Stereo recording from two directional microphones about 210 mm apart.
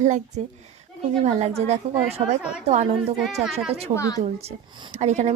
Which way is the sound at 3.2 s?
Centre (ahead or behind).